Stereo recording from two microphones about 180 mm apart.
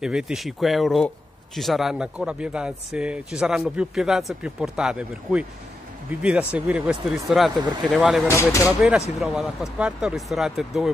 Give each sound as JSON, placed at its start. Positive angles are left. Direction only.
{"t": 0.0, "sound": "a man's voice", "side_deg": -5}
{"t": 8.3, "sound": "speech", "side_deg": 15}
{"t": 9.2, "sound": "a man's voice", "side_deg": 0}